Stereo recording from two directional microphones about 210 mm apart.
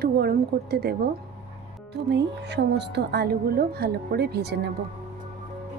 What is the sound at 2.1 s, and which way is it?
A woman's voice, 55° right (ahead or behind).